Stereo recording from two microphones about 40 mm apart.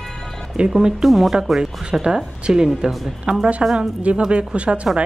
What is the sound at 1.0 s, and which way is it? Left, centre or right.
A woman's voice, centre.